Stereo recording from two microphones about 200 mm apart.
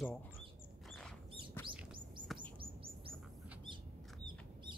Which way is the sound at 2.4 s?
25° right (ahead or behind).